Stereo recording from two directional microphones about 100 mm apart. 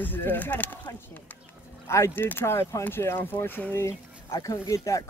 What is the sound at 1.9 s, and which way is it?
Speech, 25° left (ahead or behind).